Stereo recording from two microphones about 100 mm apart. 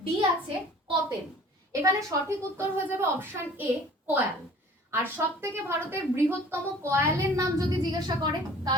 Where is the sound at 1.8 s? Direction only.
35° right (ahead or behind).